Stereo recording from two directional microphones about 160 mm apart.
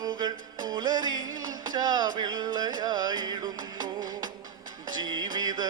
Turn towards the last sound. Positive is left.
turn(degrees=-25)  # may be behind; listen again after turning